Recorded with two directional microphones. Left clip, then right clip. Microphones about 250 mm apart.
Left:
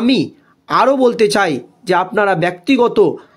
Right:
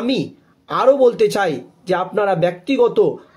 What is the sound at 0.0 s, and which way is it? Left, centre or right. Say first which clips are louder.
Speech: left 5 dB; left.